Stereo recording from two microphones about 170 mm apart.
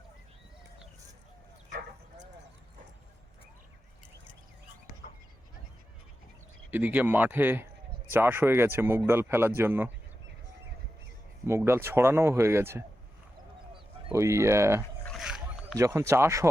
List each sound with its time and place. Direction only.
6.7 s speech: 10° right (ahead or behind)
11.4 s speech: 15° right (ahead or behind)
14.1 s speech: 15° right (ahead or behind)
15.0 s boat: centre (ahead or behind)
15.8 s speech: 15° right (ahead or behind)